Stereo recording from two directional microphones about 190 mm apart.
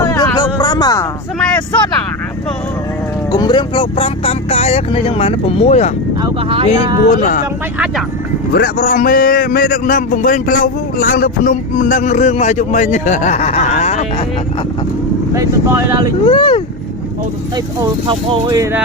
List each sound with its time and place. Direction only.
0.0 s music: 15° left (ahead or behind)
3.3 s speech: 20° left (ahead or behind)
6.2 s speech: 30° right (ahead or behind)
7.1 s a man's voice: 45° left (ahead or behind)
8.5 s a man's voice: 50° left (ahead or behind)
15.3 s speech: 15° right (ahead or behind)
16.2 s speech: 25° left (ahead or behind)
18.1 s speech: 25° right (ahead or behind)